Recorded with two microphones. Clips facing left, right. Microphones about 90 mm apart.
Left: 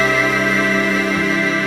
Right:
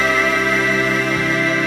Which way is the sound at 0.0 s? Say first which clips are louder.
Left 1 dB; centre (ahead or behind).